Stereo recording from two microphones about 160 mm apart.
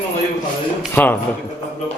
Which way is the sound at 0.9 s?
15° left (ahead or behind).